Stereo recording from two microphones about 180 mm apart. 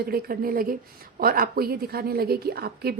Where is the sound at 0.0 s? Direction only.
55° right (ahead or behind).